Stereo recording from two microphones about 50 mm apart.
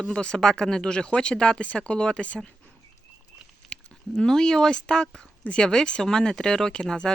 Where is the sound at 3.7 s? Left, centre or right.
Centre.